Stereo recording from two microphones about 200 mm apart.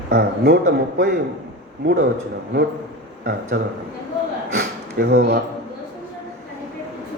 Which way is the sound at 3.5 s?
55° right (ahead or behind).